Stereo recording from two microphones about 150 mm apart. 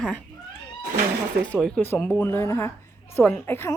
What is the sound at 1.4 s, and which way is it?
A woman's voice, 5° left (ahead or behind).